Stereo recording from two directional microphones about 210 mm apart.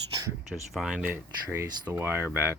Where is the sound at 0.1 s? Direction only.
20° right (ahead or behind).